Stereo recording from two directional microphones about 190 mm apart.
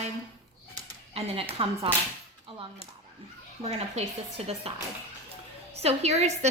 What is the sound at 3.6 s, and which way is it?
A woman's voice, 35° right (ahead or behind).